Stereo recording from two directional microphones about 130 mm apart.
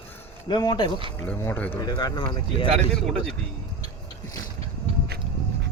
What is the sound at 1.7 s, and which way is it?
Speech, 30° left (ahead or behind).